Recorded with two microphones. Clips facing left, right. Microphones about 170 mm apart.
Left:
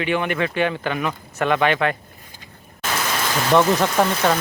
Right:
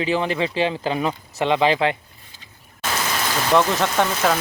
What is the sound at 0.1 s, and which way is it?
Speech, 30° right (ahead or behind).